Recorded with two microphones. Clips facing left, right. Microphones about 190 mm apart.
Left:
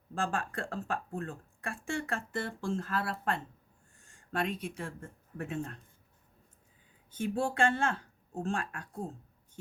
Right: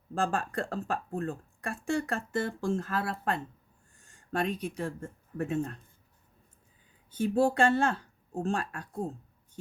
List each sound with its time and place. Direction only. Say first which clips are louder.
0.1 s speech: right 4 dB; 40° right (ahead or behind)
7.2 s speech: right 5 dB; 40° right (ahead or behind)